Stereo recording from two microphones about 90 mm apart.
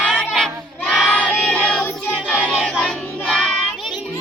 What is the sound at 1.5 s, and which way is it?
Child singing, 15° left (ahead or behind).